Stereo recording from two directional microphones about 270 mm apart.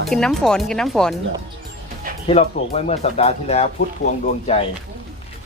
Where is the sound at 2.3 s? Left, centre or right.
Left.